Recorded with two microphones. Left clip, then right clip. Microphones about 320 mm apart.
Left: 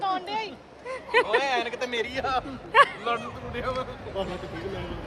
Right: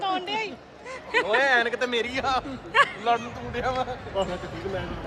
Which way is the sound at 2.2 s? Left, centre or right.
Right.